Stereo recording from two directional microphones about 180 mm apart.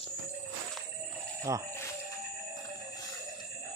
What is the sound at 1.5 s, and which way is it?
Speech, 15° right (ahead or behind).